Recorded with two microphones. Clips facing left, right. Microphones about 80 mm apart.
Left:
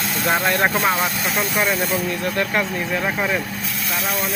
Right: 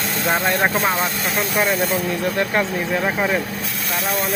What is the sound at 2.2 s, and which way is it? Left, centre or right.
Speech, right.